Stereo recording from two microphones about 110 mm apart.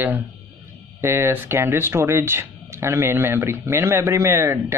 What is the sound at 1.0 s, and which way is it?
Speech, 20° right (ahead or behind).